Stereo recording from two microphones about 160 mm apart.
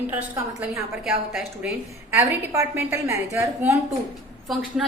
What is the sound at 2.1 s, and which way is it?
A woman's voice, 15° right (ahead or behind).